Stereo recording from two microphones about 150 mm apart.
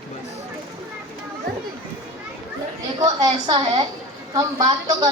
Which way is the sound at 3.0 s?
30° right (ahead or behind).